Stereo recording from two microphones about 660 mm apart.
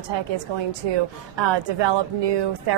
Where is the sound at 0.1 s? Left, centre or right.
Right.